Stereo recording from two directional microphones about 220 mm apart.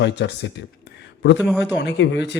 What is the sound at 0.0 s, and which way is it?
Speech, 55° left (ahead or behind).